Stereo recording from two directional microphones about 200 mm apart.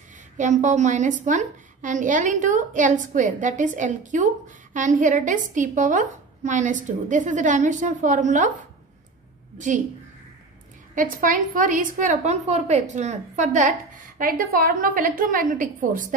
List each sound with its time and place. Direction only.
0.4 s a woman's voice: 40° right (ahead or behind)
11.0 s a woman's voice: 40° right (ahead or behind)